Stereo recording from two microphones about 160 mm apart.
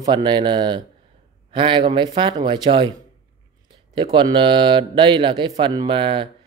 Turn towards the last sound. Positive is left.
turn(degrees=-35)  # may be behind; listen again after turning